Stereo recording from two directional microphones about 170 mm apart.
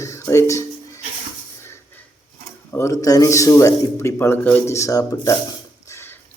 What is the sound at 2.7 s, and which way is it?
Speech, 20° left (ahead or behind).